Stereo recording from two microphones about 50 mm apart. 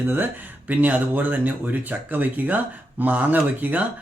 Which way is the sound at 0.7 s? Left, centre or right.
Right.